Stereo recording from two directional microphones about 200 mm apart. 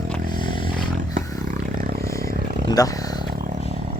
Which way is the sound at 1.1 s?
45° right (ahead or behind).